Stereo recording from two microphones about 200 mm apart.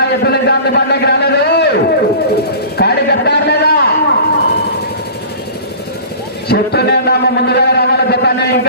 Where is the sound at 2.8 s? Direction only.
55° left (ahead or behind).